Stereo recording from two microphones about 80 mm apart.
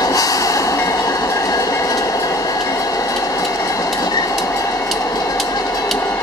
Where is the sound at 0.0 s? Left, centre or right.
Left.